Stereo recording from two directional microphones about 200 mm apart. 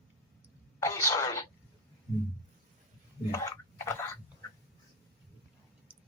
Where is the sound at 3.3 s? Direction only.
15° left (ahead or behind).